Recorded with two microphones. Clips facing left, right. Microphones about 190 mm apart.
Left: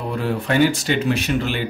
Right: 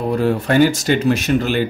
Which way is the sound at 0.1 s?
40° right (ahead or behind).